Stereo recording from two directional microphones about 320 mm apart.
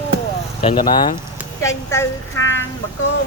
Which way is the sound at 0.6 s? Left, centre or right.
Centre.